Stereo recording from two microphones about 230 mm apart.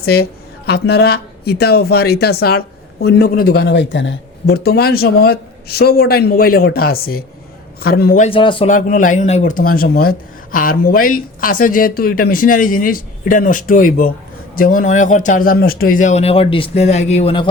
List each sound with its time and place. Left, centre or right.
0.0 s speech: left
8.2 s speech: left
8.7 s speech: left